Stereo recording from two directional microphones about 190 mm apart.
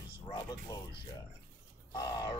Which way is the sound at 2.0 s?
20° left (ahead or behind).